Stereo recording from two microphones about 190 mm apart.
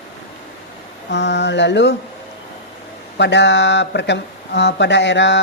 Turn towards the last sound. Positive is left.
turn(degrees=70)  # may be behind; listen again after turning